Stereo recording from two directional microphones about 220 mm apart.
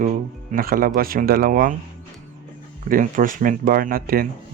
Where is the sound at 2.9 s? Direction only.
35° right (ahead or behind).